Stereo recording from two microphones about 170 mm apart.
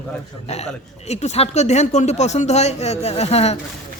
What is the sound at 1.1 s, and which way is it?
A man's voice, 40° left (ahead or behind).